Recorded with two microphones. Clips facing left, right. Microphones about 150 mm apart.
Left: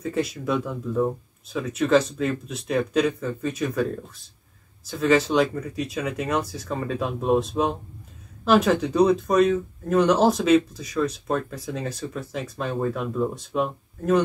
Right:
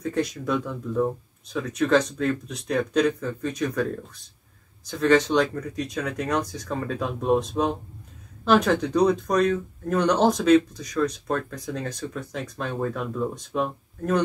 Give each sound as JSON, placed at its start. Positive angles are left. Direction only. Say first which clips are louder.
{"t": 0.0, "sound": "speech", "louder": "even", "side_deg": 5}